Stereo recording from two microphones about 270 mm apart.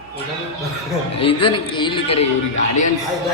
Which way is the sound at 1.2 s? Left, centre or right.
Centre.